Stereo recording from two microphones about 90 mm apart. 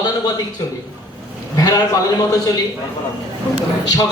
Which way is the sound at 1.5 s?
45° left (ahead or behind).